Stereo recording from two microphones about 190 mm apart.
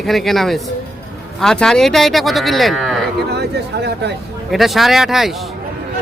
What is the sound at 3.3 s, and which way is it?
Speech, 60° right (ahead or behind).